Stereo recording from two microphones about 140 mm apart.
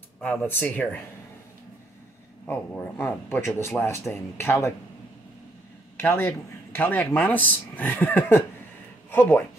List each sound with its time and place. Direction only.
0.2 s speech: 10° left (ahead or behind)
2.4 s speech: 15° left (ahead or behind)
5.9 s speech: 15° left (ahead or behind)